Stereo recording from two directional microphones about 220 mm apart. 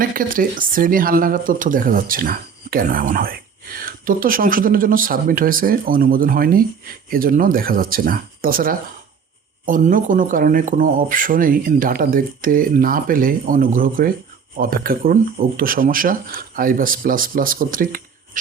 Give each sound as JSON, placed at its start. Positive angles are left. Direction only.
{"t": 0.0, "sound": "speech", "side_deg": -40}